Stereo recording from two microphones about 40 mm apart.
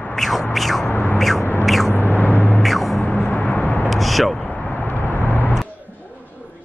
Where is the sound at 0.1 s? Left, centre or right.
Centre.